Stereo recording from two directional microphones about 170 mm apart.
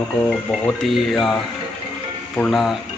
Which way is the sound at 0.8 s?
Centre (ahead or behind).